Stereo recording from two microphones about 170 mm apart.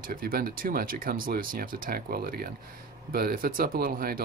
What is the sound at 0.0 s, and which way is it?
Speech, 55° right (ahead or behind).